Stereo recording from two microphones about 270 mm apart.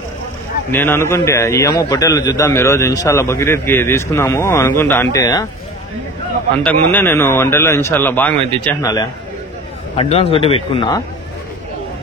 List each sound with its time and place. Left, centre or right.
0.7 s a man's voice: centre
6.6 s a man's voice: centre
9.9 s a man's voice: left